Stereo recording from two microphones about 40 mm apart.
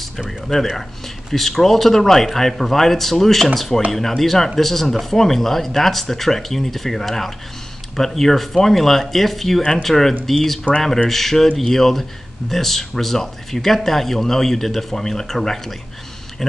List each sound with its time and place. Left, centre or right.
0.3 s speech: centre
9.6 s speech: centre